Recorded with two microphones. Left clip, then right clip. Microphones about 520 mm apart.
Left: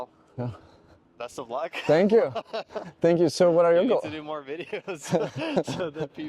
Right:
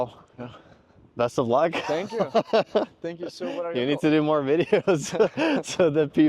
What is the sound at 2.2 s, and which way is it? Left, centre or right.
Speech, right.